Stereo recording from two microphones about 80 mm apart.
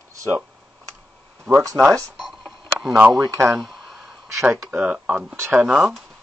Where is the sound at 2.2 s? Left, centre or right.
Centre.